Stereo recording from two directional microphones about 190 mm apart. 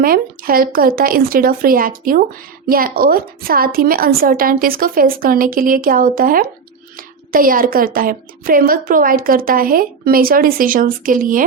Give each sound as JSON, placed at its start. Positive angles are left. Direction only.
{"t": 0.0, "sound": "a woman's voice", "side_deg": -50}